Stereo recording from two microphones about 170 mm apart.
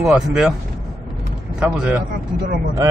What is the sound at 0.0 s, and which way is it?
Speech, 5° right (ahead or behind).